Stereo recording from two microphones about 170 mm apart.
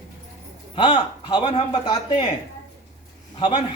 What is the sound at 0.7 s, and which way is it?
Speech, 30° left (ahead or behind).